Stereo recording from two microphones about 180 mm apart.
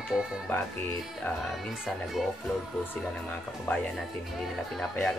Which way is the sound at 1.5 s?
Centre (ahead or behind).